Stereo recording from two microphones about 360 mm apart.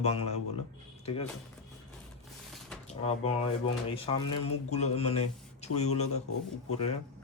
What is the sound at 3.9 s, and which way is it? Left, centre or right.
Speech, centre.